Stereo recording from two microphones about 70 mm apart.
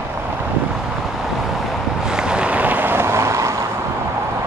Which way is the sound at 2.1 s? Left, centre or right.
Centre.